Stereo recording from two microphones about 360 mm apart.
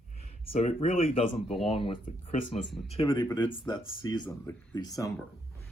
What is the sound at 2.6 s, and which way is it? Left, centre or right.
Speech, centre.